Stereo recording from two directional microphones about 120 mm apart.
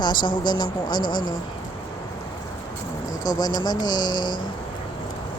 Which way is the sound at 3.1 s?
30° left (ahead or behind).